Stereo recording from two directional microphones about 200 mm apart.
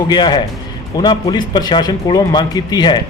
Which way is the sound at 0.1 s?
20° left (ahead or behind).